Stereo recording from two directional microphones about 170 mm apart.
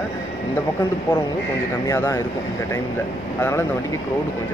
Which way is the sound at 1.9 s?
15° left (ahead or behind).